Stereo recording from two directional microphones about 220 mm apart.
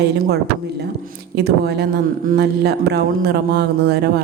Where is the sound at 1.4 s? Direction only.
50° right (ahead or behind).